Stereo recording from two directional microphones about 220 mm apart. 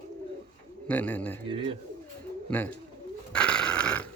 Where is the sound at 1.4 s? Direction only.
25° right (ahead or behind).